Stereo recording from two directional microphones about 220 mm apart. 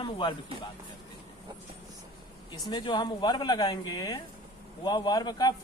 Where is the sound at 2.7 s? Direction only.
20° left (ahead or behind).